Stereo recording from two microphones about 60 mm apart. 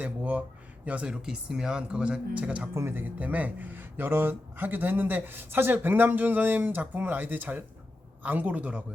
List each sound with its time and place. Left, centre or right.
0.0 s speech: right
2.7 s a man's voice: right
3.0 s a man's voice: right